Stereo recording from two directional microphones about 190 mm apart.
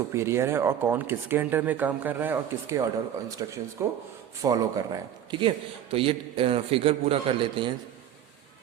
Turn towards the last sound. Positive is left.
turn(degrees=-30)  # may be behind; listen again after turning